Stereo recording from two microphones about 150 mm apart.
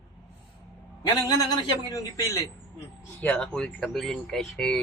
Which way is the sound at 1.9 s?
20° left (ahead or behind).